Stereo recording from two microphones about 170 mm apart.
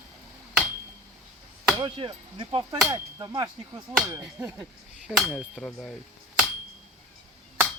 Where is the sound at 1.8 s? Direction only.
25° right (ahead or behind).